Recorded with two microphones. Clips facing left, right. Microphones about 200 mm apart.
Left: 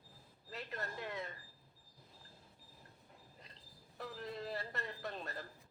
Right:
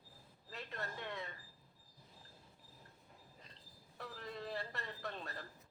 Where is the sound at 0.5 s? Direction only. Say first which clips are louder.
Left 2 dB; centre (ahead or behind).